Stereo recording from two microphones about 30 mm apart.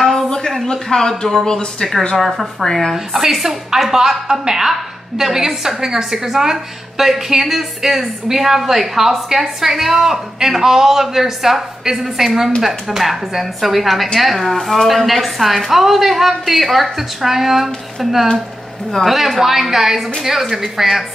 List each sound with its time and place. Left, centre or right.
0.1 s a sound: centre
0.8 s speech: centre
2.1 s a woman's voice: centre
2.6 s speech: centre
3.1 s a woman's voice: centre
3.3 s a woman's voice: centre
19.0 s a woman's voice: centre